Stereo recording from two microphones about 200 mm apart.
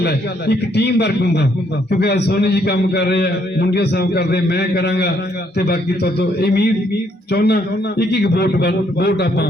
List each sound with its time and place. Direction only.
0.0 s a man's voice: 55° left (ahead or behind)